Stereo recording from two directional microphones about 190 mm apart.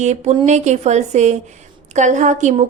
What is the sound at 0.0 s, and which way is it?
A woman's voice, 35° right (ahead or behind).